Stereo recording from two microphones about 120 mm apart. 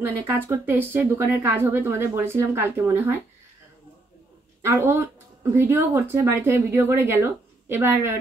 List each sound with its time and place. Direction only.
0.0 s speech: 20° right (ahead or behind)
4.6 s speech: 20° right (ahead or behind)